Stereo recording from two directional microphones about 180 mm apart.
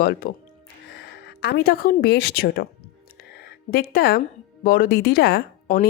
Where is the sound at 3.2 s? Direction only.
60° left (ahead or behind).